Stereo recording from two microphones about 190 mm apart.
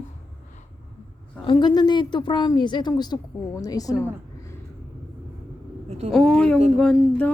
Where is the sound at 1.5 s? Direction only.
20° left (ahead or behind).